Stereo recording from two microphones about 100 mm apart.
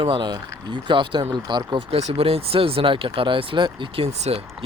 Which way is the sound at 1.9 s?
75° right (ahead or behind).